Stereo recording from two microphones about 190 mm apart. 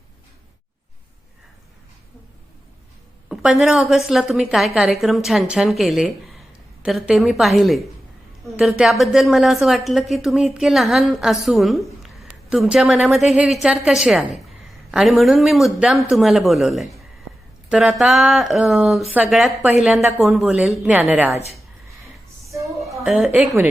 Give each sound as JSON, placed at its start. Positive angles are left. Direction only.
{"t": 3.2, "sound": "a woman's voice", "side_deg": -5}
{"t": 22.4, "sound": "a sound", "side_deg": -15}
{"t": 22.8, "sound": "a woman's voice", "side_deg": 0}